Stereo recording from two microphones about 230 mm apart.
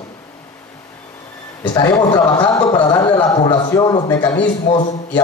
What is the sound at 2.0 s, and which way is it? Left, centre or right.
A man's voice, centre.